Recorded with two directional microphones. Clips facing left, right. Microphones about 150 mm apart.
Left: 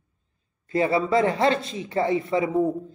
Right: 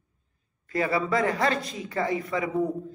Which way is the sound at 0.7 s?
25° left (ahead or behind).